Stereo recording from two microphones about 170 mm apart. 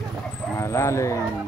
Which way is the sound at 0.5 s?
15° left (ahead or behind).